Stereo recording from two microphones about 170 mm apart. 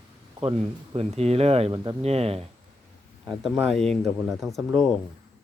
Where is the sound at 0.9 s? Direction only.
40° right (ahead or behind).